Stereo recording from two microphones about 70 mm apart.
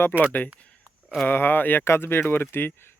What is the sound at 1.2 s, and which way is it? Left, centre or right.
Speech, left.